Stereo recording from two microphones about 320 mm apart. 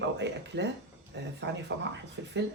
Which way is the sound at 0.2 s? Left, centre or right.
Right.